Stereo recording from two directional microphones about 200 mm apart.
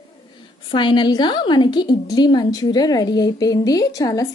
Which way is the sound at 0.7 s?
25° left (ahead or behind).